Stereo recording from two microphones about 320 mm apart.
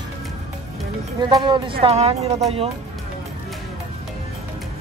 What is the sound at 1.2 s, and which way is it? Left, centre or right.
Speech, centre.